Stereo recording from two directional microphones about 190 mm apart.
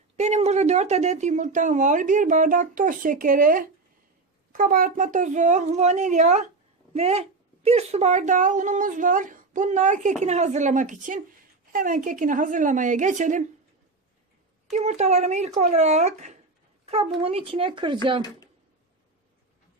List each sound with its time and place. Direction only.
0.2 s a woman's voice: 35° right (ahead or behind)
14.7 s a woman's voice: 35° right (ahead or behind)
16.8 s a sound: 30° right (ahead or behind)
17.2 s speech: 30° right (ahead or behind)